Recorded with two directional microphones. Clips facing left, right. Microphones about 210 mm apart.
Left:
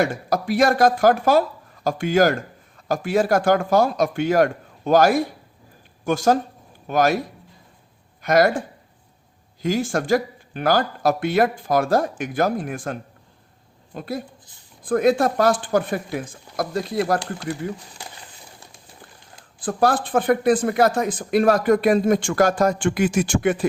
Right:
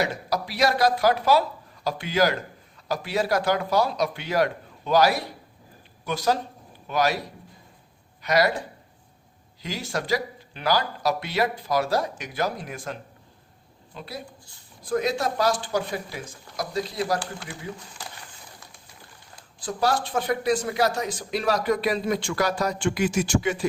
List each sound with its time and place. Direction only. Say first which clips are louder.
0.0 s speech: left 5 dB; 50° left (ahead or behind)
19.5 s speech: left 5 dB; 55° left (ahead or behind)